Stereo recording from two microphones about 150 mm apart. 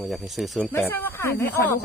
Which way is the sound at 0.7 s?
15° left (ahead or behind).